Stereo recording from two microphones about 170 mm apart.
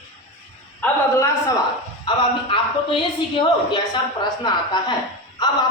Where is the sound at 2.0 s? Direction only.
30° left (ahead or behind).